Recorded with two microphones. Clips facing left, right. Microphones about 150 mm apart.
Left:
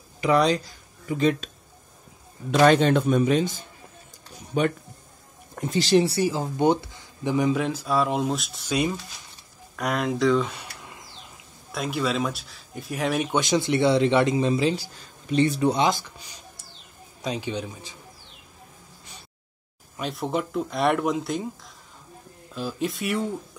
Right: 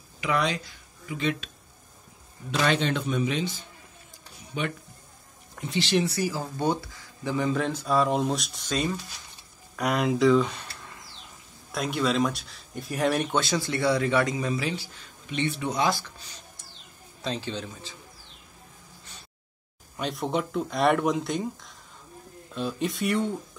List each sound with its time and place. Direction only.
0.2 s speech: 35° left (ahead or behind)
2.5 s a man's voice: 45° left (ahead or behind); by 7.6 s 15° left (ahead or behind)
7.6 s speech: 5° left (ahead or behind)
9.8 s speech: centre (ahead or behind)
10.6 s bird: 15° left (ahead or behind)
11.7 s speech: centre (ahead or behind)
13.3 s speech: 20° left (ahead or behind); by 15.8 s 35° left (ahead or behind)
15.8 s speech: 15° left (ahead or behind)
20.0 s speech: centre (ahead or behind)